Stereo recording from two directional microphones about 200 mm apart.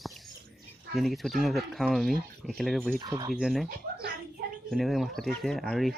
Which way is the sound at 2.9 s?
20° right (ahead or behind).